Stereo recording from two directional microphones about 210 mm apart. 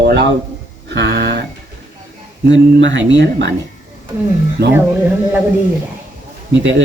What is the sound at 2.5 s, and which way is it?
A man's voice, 60° right (ahead or behind).